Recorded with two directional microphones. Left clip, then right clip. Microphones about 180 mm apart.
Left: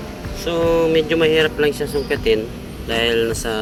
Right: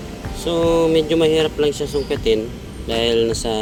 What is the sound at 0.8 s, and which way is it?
Speech, 30° right (ahead or behind).